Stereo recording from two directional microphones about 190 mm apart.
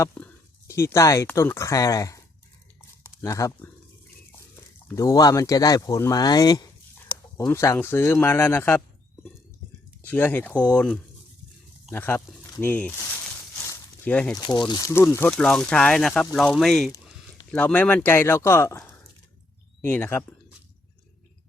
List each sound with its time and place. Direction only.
0.0 s speech: 10° left (ahead or behind)
10.0 s speech: 10° left (ahead or behind)
13.6 s a sound: 10° left (ahead or behind)
14.3 s speech: 20° left (ahead or behind)